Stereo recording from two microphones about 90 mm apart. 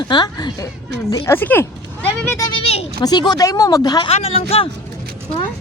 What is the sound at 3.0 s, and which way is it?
Speech, 50° left (ahead or behind).